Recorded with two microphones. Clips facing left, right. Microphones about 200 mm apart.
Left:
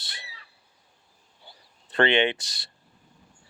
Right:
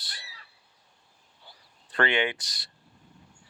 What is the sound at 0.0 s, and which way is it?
Bird, 25° left (ahead or behind).